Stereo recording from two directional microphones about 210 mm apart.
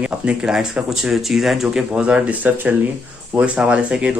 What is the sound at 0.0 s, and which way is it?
Speech, 5° right (ahead or behind).